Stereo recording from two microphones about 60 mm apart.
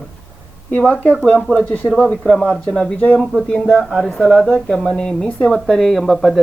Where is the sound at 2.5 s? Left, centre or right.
Centre.